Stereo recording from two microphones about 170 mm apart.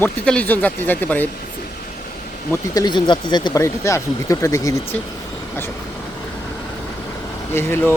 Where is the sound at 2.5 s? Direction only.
25° left (ahead or behind).